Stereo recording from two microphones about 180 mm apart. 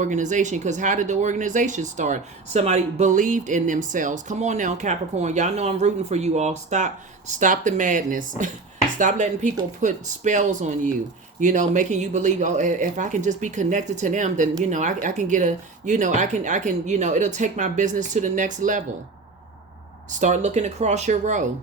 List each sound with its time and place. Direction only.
0.0 s speech: 45° right (ahead or behind)
20.1 s speech: 40° right (ahead or behind)